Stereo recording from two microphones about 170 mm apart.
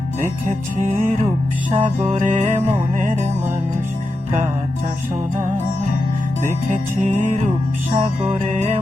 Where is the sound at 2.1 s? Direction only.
40° right (ahead or behind).